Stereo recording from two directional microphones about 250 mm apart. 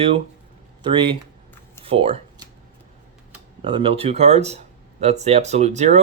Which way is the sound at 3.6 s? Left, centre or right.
Right.